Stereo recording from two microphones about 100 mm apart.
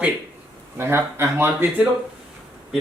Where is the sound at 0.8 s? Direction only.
25° right (ahead or behind).